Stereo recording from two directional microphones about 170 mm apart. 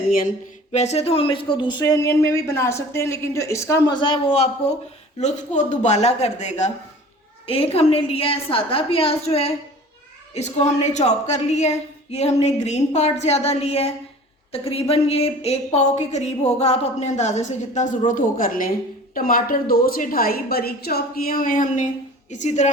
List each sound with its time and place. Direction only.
0.7 s a woman's voice: 40° left (ahead or behind)